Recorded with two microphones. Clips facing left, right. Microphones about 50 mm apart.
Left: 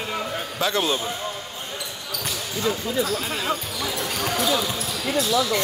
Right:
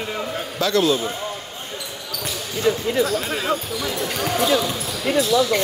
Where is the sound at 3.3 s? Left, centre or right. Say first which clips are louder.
Right 3 dB; centre.